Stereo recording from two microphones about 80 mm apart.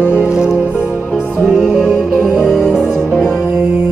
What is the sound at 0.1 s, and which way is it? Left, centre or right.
Music, centre.